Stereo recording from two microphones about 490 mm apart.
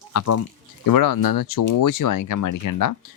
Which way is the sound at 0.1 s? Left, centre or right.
Left.